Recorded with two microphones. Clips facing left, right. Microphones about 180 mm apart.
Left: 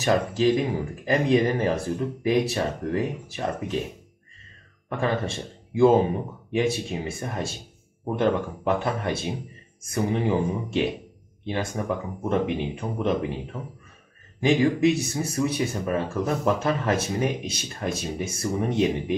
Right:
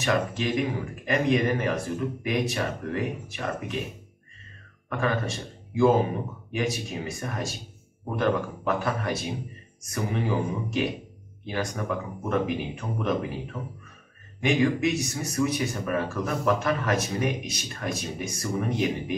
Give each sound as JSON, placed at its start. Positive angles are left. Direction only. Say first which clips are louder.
{"t": 0.0, "sound": "speech", "louder": "left 5 dB", "side_deg": 35}
{"t": 4.8, "sound": "speech", "louder": "left 2 dB", "side_deg": 30}
{"t": 6.5, "sound": "speech", "louder": "left 5 dB", "side_deg": 25}